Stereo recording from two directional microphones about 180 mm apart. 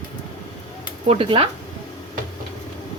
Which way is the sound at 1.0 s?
30° right (ahead or behind).